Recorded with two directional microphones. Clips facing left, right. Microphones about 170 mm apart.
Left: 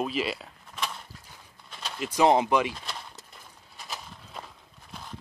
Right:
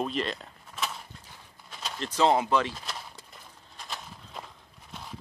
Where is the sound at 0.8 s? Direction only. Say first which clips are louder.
Even; 5° right (ahead or behind).